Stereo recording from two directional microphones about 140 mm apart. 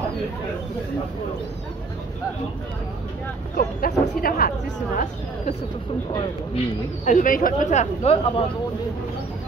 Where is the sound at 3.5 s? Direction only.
90° left.